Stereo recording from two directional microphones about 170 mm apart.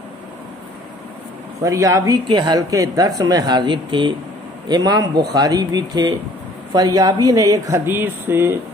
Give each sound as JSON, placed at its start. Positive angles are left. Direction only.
{"t": 1.6, "sound": "speech", "side_deg": -20}